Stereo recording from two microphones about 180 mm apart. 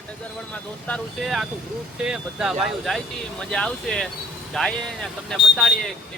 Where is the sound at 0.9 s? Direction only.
Centre (ahead or behind).